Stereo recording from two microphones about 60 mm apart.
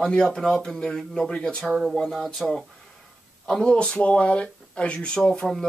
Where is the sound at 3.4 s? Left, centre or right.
Centre.